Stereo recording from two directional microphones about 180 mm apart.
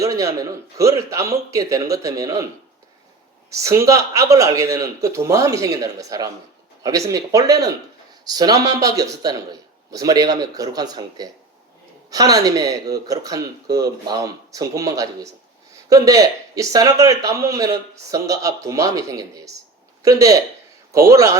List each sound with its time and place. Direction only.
0.0 s a man's voice: 20° right (ahead or behind)
3.5 s a man's voice: 15° right (ahead or behind)